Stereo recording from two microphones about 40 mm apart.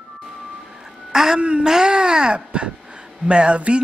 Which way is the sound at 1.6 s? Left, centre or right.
Centre.